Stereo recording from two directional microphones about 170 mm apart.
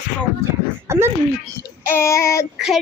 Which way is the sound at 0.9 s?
15° right (ahead or behind).